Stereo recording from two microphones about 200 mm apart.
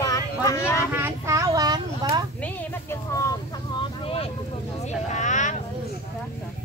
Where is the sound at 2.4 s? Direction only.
15° left (ahead or behind).